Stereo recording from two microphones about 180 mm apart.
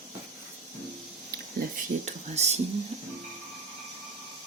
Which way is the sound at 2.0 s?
40° right (ahead or behind).